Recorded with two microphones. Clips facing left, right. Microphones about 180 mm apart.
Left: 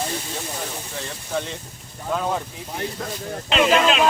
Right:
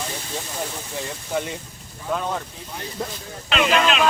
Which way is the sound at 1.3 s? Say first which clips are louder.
Right 1 dB; 15° right (ahead or behind).